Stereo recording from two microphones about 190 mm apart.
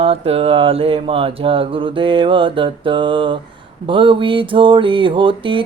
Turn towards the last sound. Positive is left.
turn(degrees=-25)  # may be behind; listen again after turning